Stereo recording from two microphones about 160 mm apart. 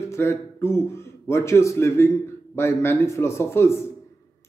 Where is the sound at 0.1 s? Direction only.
15° left (ahead or behind).